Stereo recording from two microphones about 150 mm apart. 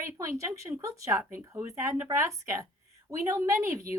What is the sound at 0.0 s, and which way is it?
A woman's voice, 20° right (ahead or behind).